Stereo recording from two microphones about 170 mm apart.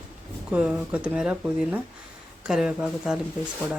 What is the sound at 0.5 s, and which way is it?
Speech, 5° right (ahead or behind).